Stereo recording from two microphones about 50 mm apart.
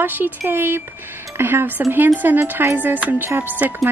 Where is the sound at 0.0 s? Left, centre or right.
Right.